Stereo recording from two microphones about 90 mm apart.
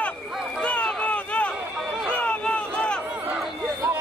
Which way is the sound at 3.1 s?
15° right (ahead or behind).